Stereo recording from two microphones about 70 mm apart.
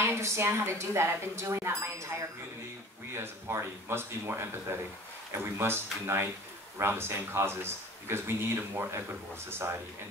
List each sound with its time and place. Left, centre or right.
0.0 s speech: right
3.2 s speech: right